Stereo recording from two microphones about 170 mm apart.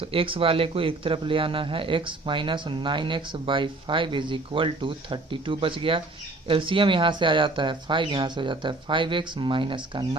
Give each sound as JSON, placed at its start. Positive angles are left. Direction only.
{"t": 0.0, "sound": "speech", "side_deg": -35}